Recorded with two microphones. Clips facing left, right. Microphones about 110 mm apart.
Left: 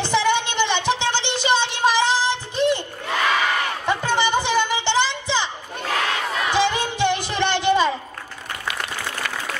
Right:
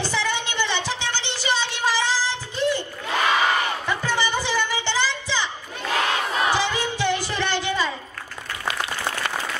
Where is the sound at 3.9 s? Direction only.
20° left (ahead or behind).